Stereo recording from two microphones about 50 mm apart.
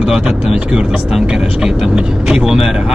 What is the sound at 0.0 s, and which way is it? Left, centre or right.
Speech, centre.